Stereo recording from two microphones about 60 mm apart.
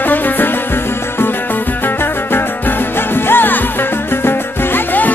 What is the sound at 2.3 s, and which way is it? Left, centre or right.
Music, left.